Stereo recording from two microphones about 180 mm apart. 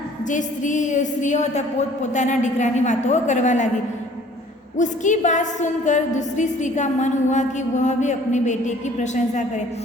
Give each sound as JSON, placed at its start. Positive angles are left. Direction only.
{"t": 0.3, "sound": "a woman's voice", "side_deg": 45}
{"t": 4.8, "sound": "a woman's voice", "side_deg": 45}